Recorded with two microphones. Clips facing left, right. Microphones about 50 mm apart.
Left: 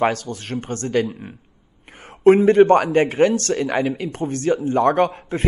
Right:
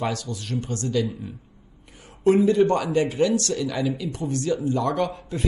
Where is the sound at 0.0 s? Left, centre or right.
Left.